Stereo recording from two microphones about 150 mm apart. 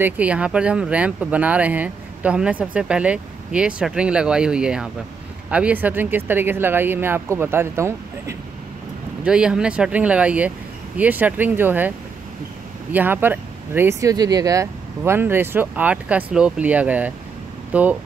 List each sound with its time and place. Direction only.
0.0 s speech: 10° right (ahead or behind)
9.2 s speech: 5° right (ahead or behind)
12.9 s speech: 15° right (ahead or behind)